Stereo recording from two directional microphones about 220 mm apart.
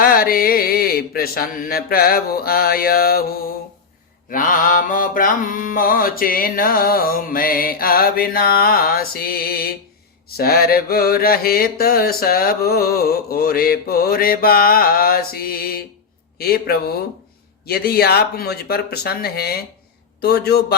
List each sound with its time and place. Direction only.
0.0 s mantra: 40° left (ahead or behind)